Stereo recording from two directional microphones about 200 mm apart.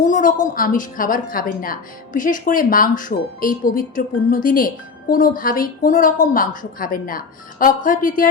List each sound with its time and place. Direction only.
0.0 s a woman's voice: 40° left (ahead or behind)